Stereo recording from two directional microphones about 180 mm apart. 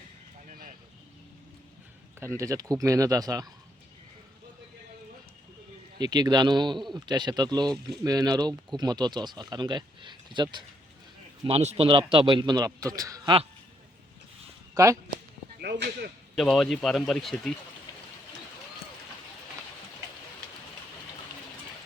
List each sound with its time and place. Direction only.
2.1 s speech: 15° right (ahead or behind)
6.0 s speech: 25° right (ahead or behind)
15.6 s speech: 65° right (ahead or behind)
16.3 s speech: centre (ahead or behind)